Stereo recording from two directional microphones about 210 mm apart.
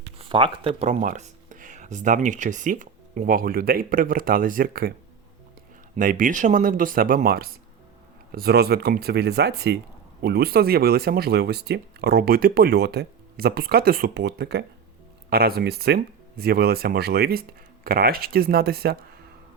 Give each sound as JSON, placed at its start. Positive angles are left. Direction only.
{"t": 0.2, "sound": "speech", "side_deg": -25}
{"t": 6.0, "sound": "speech", "side_deg": -40}